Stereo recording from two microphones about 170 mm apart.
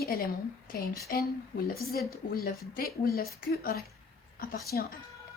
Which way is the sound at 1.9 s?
60° left (ahead or behind).